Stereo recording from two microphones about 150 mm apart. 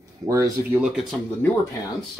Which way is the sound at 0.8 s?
Centre (ahead or behind).